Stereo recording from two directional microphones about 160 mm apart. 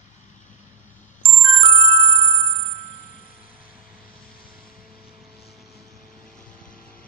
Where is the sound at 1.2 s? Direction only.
35° right (ahead or behind).